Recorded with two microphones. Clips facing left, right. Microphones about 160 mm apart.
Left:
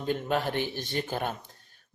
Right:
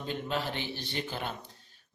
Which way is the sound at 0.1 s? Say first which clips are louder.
Left 6 dB; 50° left (ahead or behind).